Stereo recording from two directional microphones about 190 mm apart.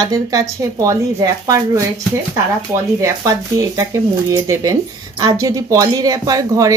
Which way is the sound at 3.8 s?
15° right (ahead or behind).